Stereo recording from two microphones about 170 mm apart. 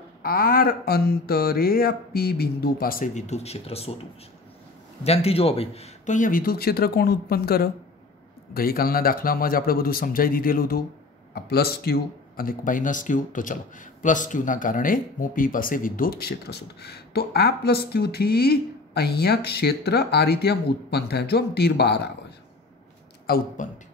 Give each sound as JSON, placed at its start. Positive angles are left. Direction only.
{"t": 0.2, "sound": "speech", "side_deg": 60}
{"t": 5.0, "sound": "speech", "side_deg": 35}
{"t": 23.2, "sound": "speech", "side_deg": 60}